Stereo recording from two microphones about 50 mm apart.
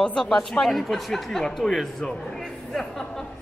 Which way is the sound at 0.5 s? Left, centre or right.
Centre.